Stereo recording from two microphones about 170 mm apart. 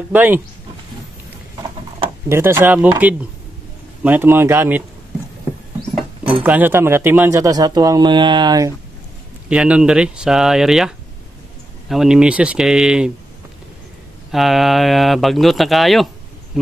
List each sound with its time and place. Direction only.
0.1 s speech: 10° right (ahead or behind)
2.2 s speech: 15° right (ahead or behind)
6.4 s speech: 10° right (ahead or behind)
9.5 s speech: 5° right (ahead or behind)
14.3 s speech: centre (ahead or behind)